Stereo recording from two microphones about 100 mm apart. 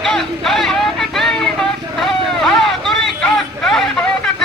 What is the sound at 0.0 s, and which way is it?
Vehicle, 5° left (ahead or behind).